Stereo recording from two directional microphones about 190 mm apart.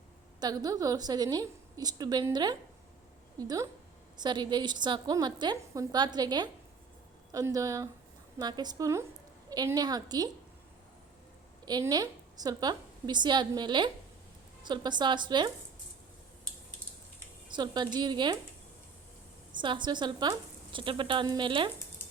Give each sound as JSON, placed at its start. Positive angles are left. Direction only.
{"t": 0.3, "sound": "a woman's voice", "side_deg": -20}
{"t": 11.6, "sound": "a woman's voice", "side_deg": -20}
{"t": 17.5, "sound": "a woman's voice", "side_deg": -25}
{"t": 19.5, "sound": "a woman's voice", "side_deg": -25}